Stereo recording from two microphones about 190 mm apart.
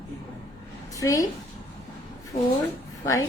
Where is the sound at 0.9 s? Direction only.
15° left (ahead or behind).